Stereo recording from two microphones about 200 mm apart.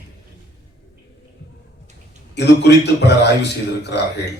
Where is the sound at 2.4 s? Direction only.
60° left (ahead or behind).